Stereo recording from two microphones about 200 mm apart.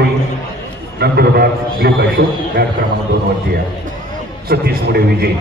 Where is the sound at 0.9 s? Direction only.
55° right (ahead or behind).